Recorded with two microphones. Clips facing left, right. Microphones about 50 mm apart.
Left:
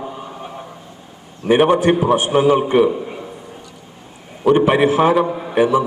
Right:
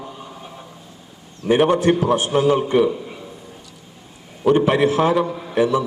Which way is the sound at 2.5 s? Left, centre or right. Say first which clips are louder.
Left 3 dB; left.